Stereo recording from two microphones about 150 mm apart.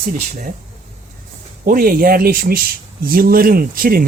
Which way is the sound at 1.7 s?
80° right.